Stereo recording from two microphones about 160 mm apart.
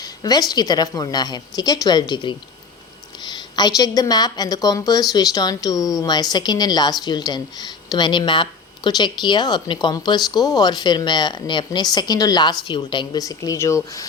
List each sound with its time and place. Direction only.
0.0 s a woman's voice: 25° left (ahead or behind)